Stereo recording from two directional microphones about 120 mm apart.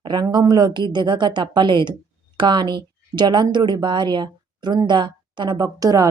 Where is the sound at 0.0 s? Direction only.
35° right (ahead or behind).